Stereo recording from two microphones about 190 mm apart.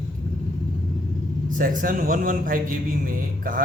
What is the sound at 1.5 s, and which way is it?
A man's voice, 45° right (ahead or behind).